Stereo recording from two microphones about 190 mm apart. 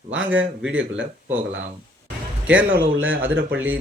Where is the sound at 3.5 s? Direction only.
10° right (ahead or behind).